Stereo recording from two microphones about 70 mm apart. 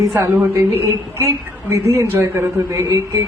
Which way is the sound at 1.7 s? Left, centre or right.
Right.